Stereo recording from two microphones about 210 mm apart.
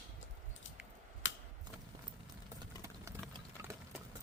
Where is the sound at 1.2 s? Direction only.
65° left (ahead or behind).